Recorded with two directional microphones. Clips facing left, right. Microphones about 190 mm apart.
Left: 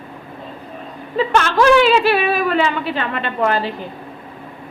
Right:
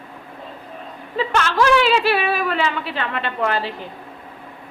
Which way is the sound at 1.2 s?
50° left (ahead or behind).